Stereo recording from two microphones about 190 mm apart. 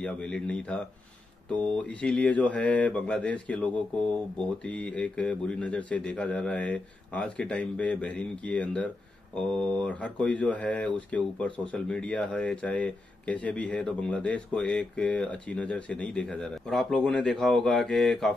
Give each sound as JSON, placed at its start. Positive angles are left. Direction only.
{"t": 0.0, "sound": "speech", "side_deg": 5}